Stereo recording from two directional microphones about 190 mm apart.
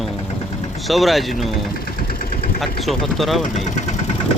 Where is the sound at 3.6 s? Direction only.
40° left (ahead or behind).